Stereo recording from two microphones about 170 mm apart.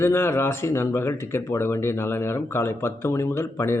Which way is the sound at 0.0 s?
15° left (ahead or behind).